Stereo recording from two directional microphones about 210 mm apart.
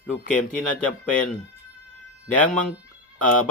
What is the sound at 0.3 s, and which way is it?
Speech, 40° left (ahead or behind).